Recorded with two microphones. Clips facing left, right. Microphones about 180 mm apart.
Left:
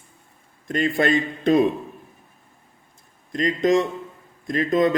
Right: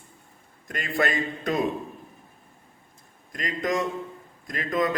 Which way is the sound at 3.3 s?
25° left (ahead or behind).